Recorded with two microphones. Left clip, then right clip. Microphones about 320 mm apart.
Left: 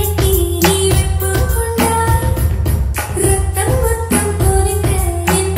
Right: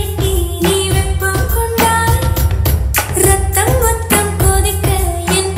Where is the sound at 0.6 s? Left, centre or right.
Left.